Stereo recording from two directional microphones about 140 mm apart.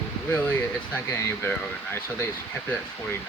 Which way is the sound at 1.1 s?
15° left (ahead or behind).